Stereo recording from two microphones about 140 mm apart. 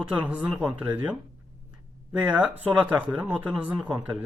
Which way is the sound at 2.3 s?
5° right (ahead or behind).